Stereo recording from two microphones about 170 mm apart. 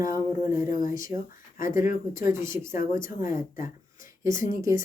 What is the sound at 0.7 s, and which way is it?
Speech, 50° left (ahead or behind).